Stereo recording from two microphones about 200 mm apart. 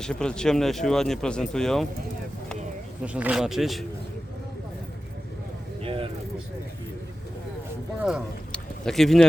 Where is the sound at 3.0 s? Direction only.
5° right (ahead or behind).